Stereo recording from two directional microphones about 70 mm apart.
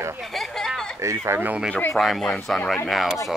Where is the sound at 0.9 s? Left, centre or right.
Right.